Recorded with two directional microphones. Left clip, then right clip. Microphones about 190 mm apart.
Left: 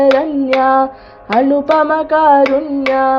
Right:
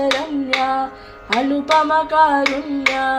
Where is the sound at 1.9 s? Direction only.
45° left (ahead or behind).